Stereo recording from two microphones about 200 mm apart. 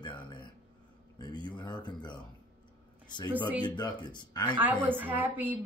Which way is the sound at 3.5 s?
20° left (ahead or behind).